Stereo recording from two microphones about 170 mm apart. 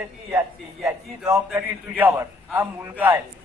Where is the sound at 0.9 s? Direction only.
20° right (ahead or behind).